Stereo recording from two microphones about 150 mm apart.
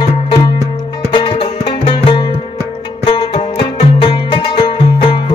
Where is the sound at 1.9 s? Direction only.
35° left (ahead or behind).